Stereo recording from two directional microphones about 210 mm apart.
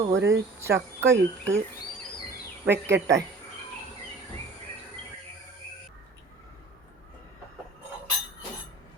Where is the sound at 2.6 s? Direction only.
55° right (ahead or behind).